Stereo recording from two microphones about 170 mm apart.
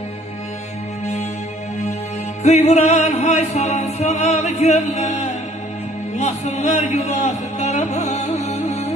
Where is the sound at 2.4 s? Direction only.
40° left (ahead or behind).